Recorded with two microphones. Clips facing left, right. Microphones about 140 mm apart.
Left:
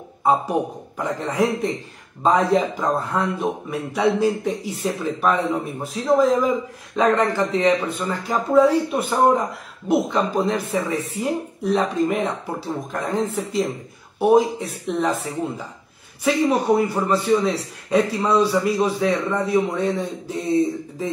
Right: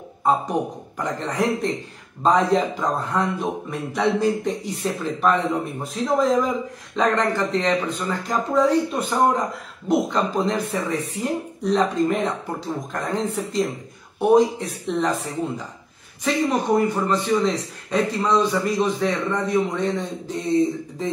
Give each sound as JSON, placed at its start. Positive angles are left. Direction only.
{"t": 0.2, "sound": "a man's voice", "side_deg": 5}
{"t": 16.3, "sound": "a man's voice", "side_deg": 10}